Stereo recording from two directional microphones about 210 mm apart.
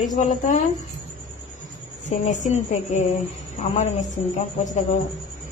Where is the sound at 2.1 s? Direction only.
35° left (ahead or behind).